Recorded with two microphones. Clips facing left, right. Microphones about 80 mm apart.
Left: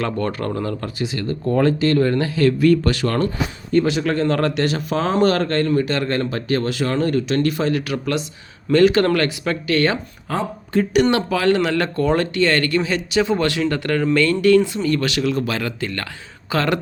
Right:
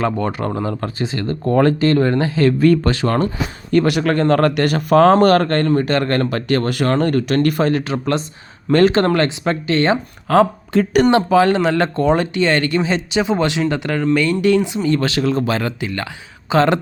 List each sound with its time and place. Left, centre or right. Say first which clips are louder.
0.0 s speech: right 3 dB; centre
0.8 s speech: right 3 dB; right
3.7 s speech: right 3 dB; right
10.2 s speech: right 11 dB; right
11.1 s speech: right 4 dB; right